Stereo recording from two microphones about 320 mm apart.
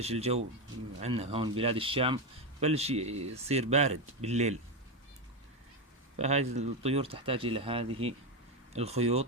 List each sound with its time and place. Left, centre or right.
0.0 s a man's voice: centre
6.1 s a man's voice: right